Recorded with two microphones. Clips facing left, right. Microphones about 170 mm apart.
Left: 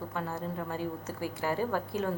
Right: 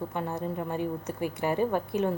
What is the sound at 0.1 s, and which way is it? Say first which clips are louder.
A woman's voice: right 4 dB; 20° right (ahead or behind).